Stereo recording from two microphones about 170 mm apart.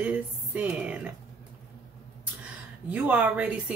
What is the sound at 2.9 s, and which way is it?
Speech, 10° right (ahead or behind).